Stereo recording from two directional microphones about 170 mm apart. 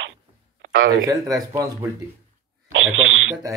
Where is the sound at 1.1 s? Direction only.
20° right (ahead or behind).